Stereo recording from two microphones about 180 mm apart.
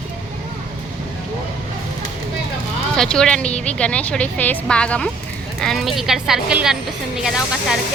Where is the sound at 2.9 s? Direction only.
5° left (ahead or behind).